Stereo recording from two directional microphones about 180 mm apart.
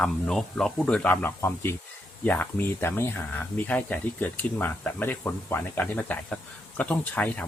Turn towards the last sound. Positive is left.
turn(degrees=10)  # may be behind; listen again after turning